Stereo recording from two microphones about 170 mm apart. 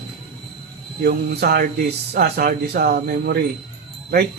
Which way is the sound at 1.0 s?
70° right (ahead or behind).